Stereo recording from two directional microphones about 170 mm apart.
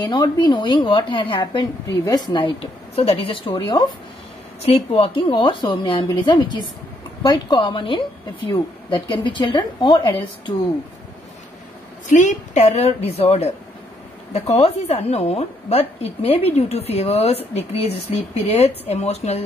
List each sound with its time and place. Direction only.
0.0 s a woman's voice: 25° left (ahead or behind)
4.6 s a woman's voice: 35° left (ahead or behind)
12.2 s a woman's voice: 45° left (ahead or behind)